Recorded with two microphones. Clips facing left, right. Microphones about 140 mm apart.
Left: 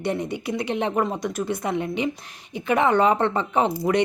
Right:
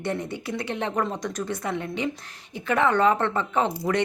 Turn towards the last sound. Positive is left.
turn(degrees=15)  # may be behind; listen again after turning